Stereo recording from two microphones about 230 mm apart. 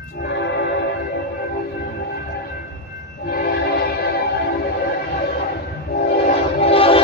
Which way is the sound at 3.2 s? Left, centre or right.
Left.